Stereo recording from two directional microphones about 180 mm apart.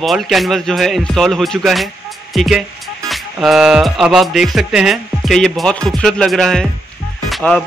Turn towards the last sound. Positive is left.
turn(degrees=0)  # may be behind; listen again after turning